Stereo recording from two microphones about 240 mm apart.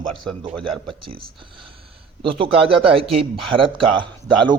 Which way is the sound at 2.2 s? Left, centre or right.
Right.